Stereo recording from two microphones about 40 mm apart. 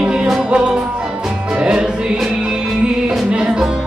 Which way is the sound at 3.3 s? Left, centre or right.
Right.